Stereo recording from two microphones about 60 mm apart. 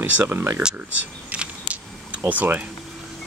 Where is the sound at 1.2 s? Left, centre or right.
Right.